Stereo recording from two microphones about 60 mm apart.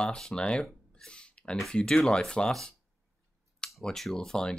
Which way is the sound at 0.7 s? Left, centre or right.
Centre.